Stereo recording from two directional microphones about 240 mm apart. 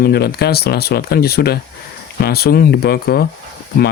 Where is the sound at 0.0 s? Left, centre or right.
Left.